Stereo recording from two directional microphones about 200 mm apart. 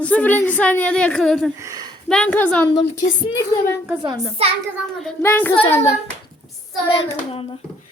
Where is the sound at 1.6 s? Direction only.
15° right (ahead or behind).